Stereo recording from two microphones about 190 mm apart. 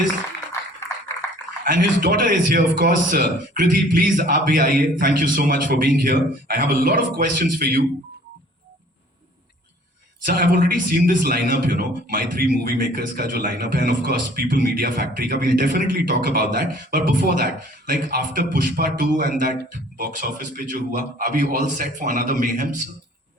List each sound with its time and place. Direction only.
1.6 s a man's voice: 45° right (ahead or behind)
10.2 s a man's voice: 50° right (ahead or behind)